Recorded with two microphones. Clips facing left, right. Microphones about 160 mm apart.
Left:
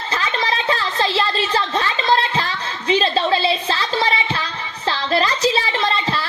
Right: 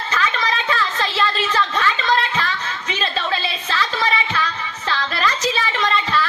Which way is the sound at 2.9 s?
30° left (ahead or behind).